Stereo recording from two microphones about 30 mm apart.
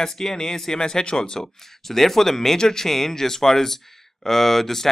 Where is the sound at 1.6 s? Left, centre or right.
Centre.